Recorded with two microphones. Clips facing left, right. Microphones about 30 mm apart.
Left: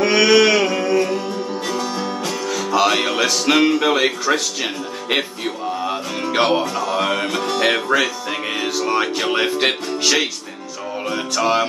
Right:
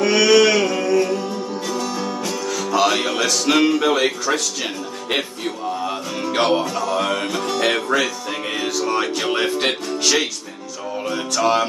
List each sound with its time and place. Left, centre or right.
0.0 s music: centre